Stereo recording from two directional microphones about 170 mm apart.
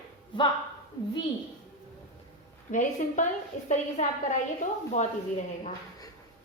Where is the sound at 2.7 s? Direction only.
50° left (ahead or behind).